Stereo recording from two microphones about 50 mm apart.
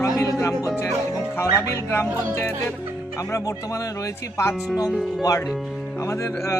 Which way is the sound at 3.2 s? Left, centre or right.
Left.